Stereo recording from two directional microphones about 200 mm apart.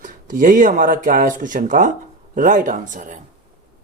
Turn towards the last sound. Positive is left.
turn(degrees=-40)  # may be behind; listen again after turning